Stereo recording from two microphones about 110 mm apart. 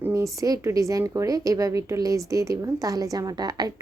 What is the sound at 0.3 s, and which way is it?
A woman's voice, 30° right (ahead or behind).